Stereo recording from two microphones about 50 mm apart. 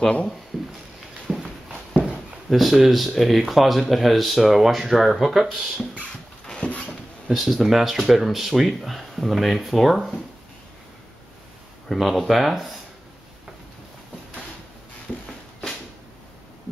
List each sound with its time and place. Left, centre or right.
0.5 s a sound: centre
1.3 s walk: centre
2.5 s speech: centre
6.4 s dog: centre
7.2 s speech: centre
11.9 s speech: centre